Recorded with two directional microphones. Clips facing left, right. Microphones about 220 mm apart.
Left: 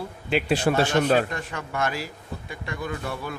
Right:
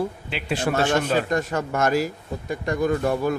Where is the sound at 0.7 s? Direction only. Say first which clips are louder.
Left 1 dB; 35° left (ahead or behind).